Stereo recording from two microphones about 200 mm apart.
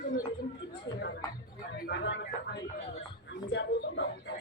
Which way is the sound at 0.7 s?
60° left (ahead or behind).